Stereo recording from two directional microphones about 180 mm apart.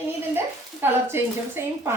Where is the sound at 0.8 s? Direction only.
10° right (ahead or behind).